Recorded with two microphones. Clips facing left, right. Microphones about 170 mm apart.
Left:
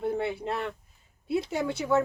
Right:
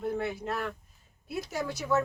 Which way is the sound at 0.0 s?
30° left (ahead or behind).